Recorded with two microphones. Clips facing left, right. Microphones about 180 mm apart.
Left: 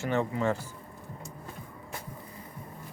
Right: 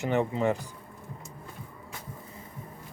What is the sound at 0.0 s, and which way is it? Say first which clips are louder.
Speech: right 2 dB; 15° right (ahead or behind).